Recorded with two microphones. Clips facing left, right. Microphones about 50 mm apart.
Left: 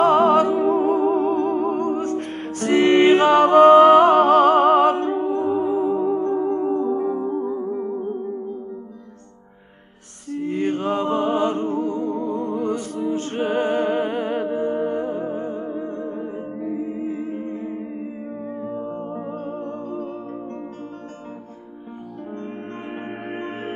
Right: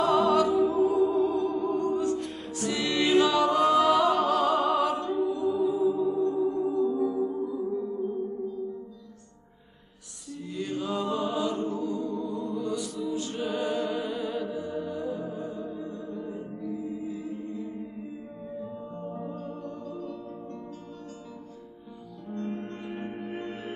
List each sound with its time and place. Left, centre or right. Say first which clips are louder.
0.0 s music: left 7 dB; left
7.4 s music: left 5 dB; left
10.3 s music: left 10 dB; left
14.4 s humming: left 10 dB; left
14.9 s music: left 8 dB; left
17.5 s music: left 7 dB; left
17.9 s music: left 9 dB; left
22.4 s music: left 3 dB; left
23.2 s music: left 6 dB; left